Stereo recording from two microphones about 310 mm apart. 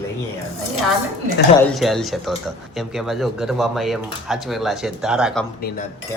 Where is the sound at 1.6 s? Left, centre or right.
Centre.